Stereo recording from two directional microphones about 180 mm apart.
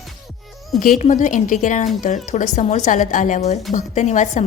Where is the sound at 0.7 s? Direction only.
45° left (ahead or behind).